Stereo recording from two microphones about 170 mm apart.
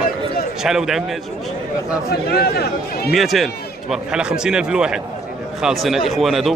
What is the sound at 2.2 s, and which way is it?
Speech, 65° left (ahead or behind).